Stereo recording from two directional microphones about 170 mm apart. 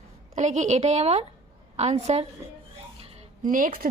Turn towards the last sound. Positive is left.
turn(degrees=-55)  # may be behind; listen again after turning